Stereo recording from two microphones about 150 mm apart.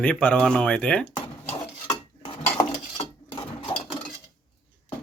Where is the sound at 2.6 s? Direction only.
30° left (ahead or behind).